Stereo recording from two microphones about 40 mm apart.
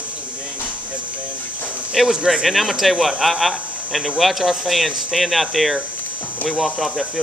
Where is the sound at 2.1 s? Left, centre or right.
Centre.